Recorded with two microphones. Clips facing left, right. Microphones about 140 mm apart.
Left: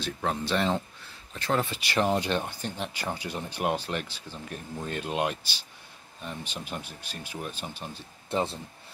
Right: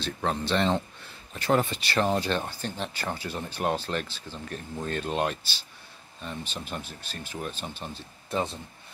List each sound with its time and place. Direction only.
0.0 s speech: 5° left (ahead or behind)
1.3 s speech: 10° right (ahead or behind)
1.7 s speech: 10° left (ahead or behind)
8.3 s speech: 25° left (ahead or behind)